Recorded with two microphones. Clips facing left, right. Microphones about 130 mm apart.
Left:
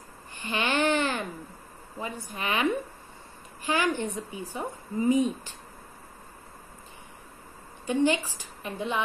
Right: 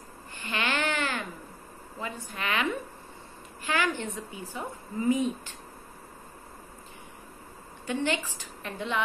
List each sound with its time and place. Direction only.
0.5 s a sound: 20° left (ahead or behind)
2.0 s a woman's voice: 15° left (ahead or behind)
7.8 s a woman's voice: 15° left (ahead or behind)